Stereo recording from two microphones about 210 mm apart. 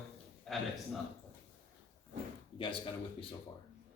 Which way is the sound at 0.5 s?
Centre (ahead or behind).